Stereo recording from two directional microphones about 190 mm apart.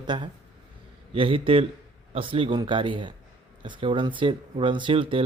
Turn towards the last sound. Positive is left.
turn(degrees=-30)  # may be behind; listen again after turning